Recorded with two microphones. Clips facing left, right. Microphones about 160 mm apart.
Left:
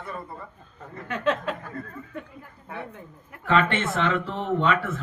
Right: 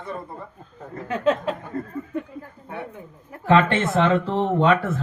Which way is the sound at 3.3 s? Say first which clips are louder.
Right 5 dB; 35° right (ahead or behind).